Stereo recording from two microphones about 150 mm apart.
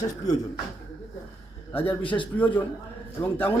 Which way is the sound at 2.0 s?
35° left (ahead or behind).